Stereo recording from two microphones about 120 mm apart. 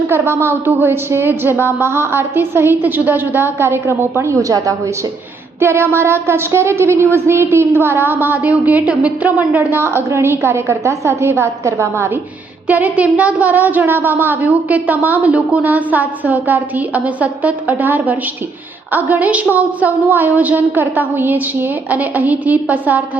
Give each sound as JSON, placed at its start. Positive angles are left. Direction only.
{"t": 0.1, "sound": "a woman's voice", "side_deg": -20}
{"t": 5.5, "sound": "a sound", "side_deg": -20}
{"t": 5.9, "sound": "a woman's voice", "side_deg": -20}
{"t": 12.6, "sound": "a woman's voice", "side_deg": -15}